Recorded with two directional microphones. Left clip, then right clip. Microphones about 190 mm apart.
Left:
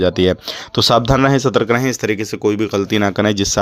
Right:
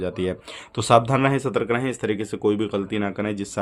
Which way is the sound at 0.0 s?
40° left (ahead or behind).